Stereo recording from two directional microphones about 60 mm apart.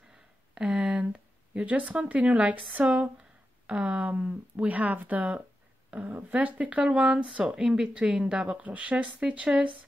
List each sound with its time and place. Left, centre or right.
0.6 s speech: centre